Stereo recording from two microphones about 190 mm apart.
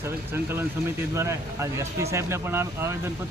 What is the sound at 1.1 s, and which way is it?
Speech, 15° right (ahead or behind).